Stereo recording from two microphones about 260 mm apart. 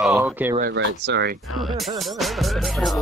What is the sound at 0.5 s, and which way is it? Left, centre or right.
Speech, right.